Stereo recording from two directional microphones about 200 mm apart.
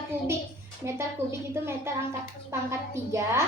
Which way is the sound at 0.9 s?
15° right (ahead or behind).